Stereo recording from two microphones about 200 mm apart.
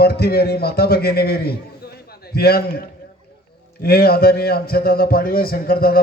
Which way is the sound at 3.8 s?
50° left (ahead or behind).